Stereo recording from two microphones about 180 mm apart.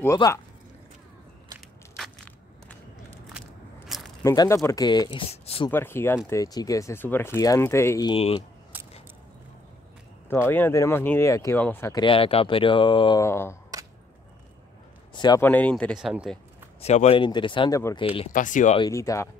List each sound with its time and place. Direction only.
0.0 s speech: 15° left (ahead or behind)
4.2 s speech: 15° left (ahead or behind); by 5.7 s 35° left (ahead or behind)
5.7 s speech: 10° left (ahead or behind)
8.1 s speech: 30° left (ahead or behind)
10.2 s speech: 10° left (ahead or behind)
12.0 s speech: 30° left (ahead or behind)
13.2 s speech: 15° left (ahead or behind)
15.1 s speech: 25° left (ahead or behind)
15.4 s speech: 10° left (ahead or behind)
16.8 s speech: 35° left (ahead or behind); by 18.0 s 20° left (ahead or behind)
18.0 s speech: 30° left (ahead or behind)
18.3 s speech: 45° left (ahead or behind)
18.8 s speech: 20° left (ahead or behind)